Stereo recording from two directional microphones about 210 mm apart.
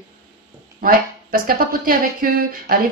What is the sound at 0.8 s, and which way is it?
A woman's voice, 45° right (ahead or behind).